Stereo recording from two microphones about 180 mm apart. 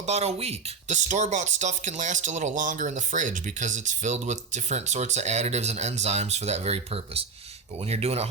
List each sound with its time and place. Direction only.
0.0 s speech: 35° right (ahead or behind)